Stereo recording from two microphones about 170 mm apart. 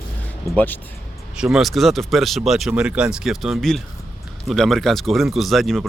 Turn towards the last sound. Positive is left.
turn(degrees=0)  # may be behind; listen again after turning